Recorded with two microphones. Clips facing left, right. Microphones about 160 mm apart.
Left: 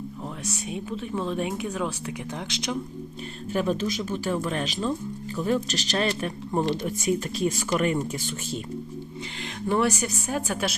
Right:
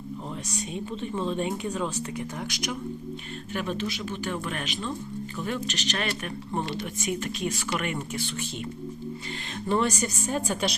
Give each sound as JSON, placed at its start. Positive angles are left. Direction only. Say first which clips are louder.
{"t": 0.5, "sound": "a woman's voice", "louder": "even", "side_deg": 5}
{"t": 3.5, "sound": "speech", "louder": "left 5 dB", "side_deg": 35}
{"t": 9.6, "sound": "a woman's voice", "louder": "left 2 dB", "side_deg": 10}